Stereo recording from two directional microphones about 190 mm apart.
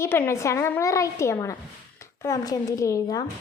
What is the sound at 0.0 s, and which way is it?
A woman's voice, 10° left (ahead or behind).